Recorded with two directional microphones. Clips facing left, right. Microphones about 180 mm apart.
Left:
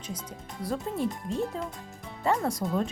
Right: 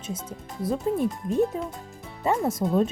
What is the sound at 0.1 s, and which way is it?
Speech, 25° right (ahead or behind).